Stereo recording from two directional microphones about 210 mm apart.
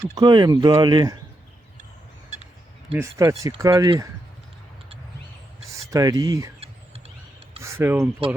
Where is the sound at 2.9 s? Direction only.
15° right (ahead or behind).